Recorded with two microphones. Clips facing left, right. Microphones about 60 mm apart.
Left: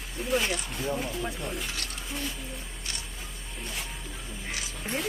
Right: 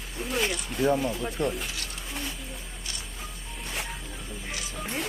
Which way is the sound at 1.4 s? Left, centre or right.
Right.